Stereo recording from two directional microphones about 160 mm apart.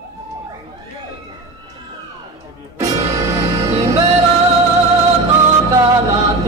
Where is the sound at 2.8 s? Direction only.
20° right (ahead or behind).